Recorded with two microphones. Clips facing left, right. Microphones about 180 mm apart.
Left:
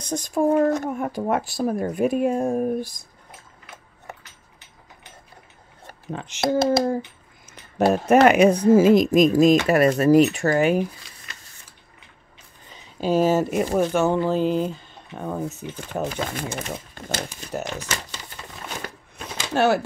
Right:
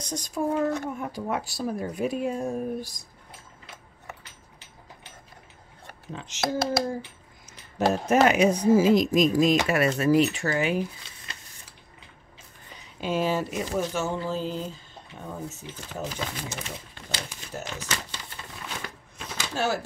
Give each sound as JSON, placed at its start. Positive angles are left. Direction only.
{"t": 0.1, "sound": "speech", "side_deg": 50}
{"t": 6.1, "sound": "speech", "side_deg": 60}
{"t": 7.8, "sound": "speech", "side_deg": 60}
{"t": 13.0, "sound": "speech", "side_deg": 40}
{"t": 17.5, "sound": "speech", "side_deg": 65}
{"t": 19.1, "sound": "a sound", "side_deg": 65}